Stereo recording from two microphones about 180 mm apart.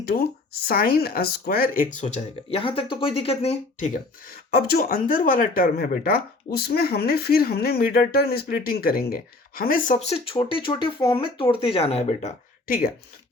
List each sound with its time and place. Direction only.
0.7 s speech: 55° left (ahead or behind); by 12.3 s 35° left (ahead or behind)
12.6 s speech: 50° left (ahead or behind)